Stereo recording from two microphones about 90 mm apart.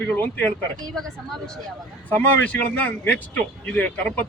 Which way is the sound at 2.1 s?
20° left (ahead or behind).